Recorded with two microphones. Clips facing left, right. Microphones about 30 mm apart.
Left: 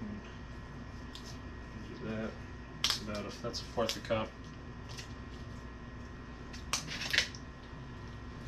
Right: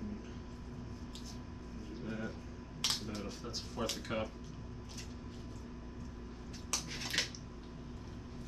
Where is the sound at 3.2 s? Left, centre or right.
Centre.